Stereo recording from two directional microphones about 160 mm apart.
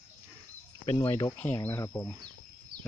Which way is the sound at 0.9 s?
25° left (ahead or behind).